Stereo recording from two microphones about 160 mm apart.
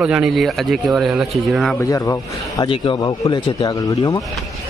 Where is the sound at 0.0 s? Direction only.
5° right (ahead or behind).